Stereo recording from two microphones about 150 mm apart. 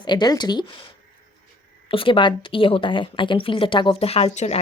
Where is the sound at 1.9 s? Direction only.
35° left (ahead or behind).